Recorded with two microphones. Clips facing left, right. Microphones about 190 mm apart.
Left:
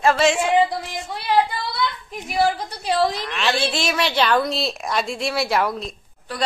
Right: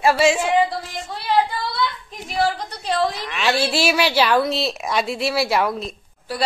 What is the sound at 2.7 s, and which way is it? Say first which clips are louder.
Speech: left 1 dB; 10° left (ahead or behind).